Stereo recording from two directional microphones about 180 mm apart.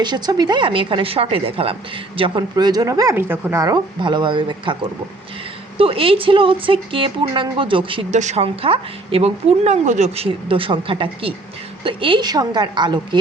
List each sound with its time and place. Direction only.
0.0 s speech: 25° right (ahead or behind)